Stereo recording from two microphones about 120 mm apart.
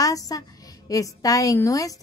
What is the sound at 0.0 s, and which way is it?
Speech, 30° left (ahead or behind).